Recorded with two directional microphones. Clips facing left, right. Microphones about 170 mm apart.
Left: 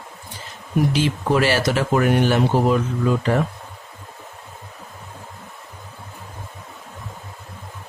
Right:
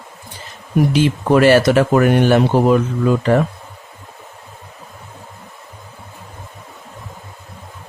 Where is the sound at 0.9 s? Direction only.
55° right (ahead or behind).